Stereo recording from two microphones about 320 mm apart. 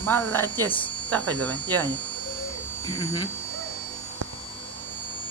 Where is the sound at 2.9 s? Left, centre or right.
Centre.